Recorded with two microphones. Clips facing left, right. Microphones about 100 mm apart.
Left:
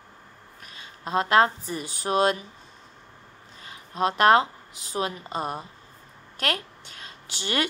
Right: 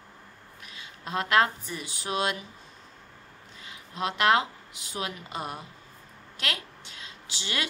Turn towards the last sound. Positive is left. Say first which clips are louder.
# left 6 dB
turn(degrees=50)  # may be behind; listen again after turning